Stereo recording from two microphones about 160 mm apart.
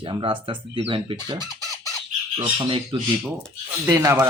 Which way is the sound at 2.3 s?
30° right (ahead or behind).